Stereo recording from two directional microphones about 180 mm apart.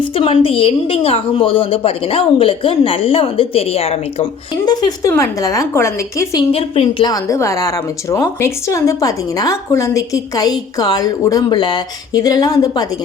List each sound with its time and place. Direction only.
0.0 s a woman's voice: 30° left (ahead or behind)
6.5 s a woman's voice: 30° left (ahead or behind)
7.1 s a woman's voice: 15° left (ahead or behind)